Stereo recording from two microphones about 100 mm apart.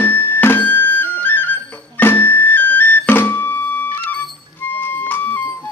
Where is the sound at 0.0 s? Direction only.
20° left (ahead or behind).